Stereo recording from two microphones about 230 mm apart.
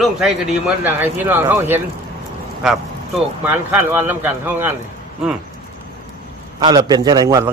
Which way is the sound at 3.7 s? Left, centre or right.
Centre.